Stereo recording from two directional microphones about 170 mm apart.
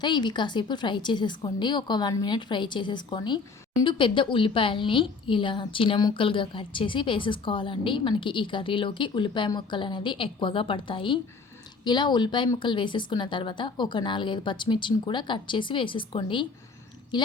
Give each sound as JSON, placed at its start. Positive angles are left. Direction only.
{"t": 0.0, "sound": "a woman's voice", "side_deg": 25}